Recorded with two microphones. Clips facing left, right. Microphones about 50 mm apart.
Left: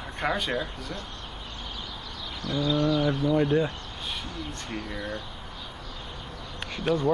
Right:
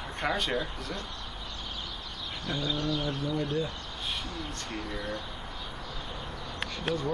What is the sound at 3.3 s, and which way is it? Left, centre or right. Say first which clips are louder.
Speech: left 8 dB; left.